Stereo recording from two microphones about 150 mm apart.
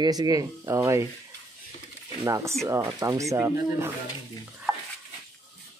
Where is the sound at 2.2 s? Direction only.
20° right (ahead or behind).